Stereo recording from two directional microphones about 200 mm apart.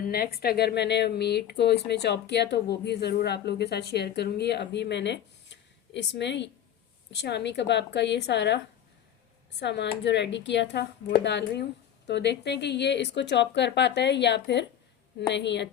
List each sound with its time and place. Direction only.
0.1 s speech: 50° left (ahead or behind)